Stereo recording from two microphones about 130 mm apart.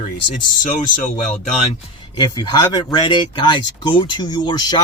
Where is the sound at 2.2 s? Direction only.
35° left (ahead or behind).